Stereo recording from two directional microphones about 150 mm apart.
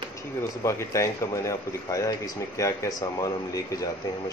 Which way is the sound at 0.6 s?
20° left (ahead or behind).